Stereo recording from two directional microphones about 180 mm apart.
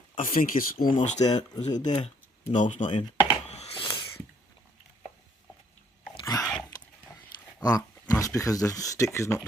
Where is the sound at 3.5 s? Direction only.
35° left (ahead or behind).